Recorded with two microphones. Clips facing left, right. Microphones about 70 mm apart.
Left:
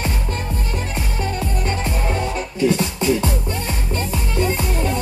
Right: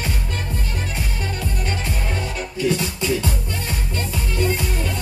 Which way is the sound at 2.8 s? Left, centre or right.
Left.